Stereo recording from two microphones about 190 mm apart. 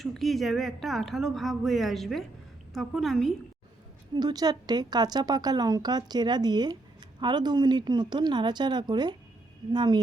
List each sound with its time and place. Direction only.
0.0 s speech: centre (ahead or behind)
4.1 s a woman's voice: 20° right (ahead or behind)